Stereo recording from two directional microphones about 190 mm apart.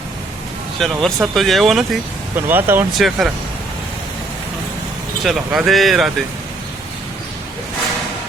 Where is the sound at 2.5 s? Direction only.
10° right (ahead or behind).